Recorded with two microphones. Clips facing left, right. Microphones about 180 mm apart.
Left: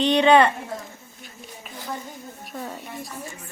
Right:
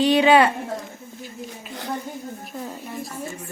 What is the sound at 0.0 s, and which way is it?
Speech, 5° right (ahead or behind).